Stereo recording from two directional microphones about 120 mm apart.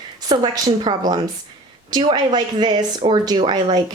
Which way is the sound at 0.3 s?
40° right (ahead or behind).